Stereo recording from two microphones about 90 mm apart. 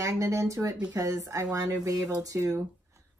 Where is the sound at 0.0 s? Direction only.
35° right (ahead or behind).